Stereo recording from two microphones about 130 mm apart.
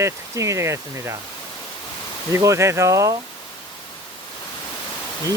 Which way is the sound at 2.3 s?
25° right (ahead or behind).